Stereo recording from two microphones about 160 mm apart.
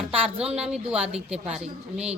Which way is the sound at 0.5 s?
5° right (ahead or behind).